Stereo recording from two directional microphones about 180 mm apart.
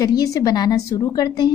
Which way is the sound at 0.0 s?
20° left (ahead or behind).